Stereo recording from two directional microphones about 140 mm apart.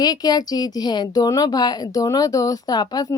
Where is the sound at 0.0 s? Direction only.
30° left (ahead or behind).